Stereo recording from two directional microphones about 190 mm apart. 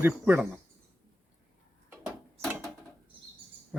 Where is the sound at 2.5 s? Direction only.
10° right (ahead or behind).